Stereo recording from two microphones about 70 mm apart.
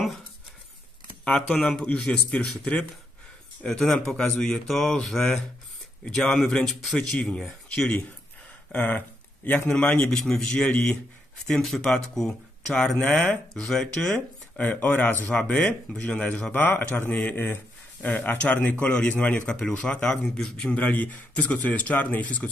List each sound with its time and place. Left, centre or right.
1.2 s speech: centre
3.6 s speech: centre
8.7 s speech: left
10.1 s speech: centre
14.6 s speech: left
16.5 s speech: left